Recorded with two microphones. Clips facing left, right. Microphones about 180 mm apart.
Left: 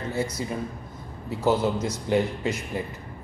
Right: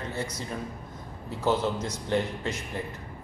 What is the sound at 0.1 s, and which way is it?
A man's voice, 10° left (ahead or behind).